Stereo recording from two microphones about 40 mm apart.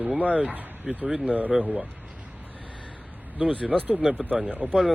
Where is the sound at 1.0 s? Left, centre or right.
Right.